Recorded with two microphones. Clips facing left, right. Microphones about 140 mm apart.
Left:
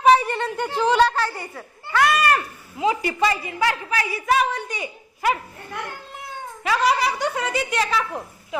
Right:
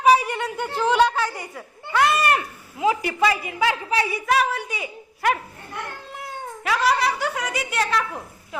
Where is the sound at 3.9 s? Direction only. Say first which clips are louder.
Right 2 dB; 25° right (ahead or behind).